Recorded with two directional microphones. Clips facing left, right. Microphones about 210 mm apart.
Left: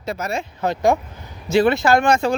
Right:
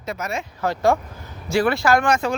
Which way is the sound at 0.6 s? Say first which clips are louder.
Left 1 dB; 20° left (ahead or behind).